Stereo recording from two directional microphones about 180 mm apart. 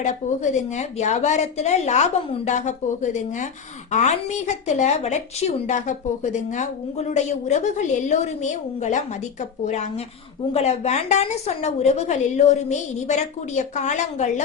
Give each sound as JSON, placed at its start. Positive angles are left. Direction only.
{"t": 0.0, "sound": "a woman's voice", "side_deg": 40}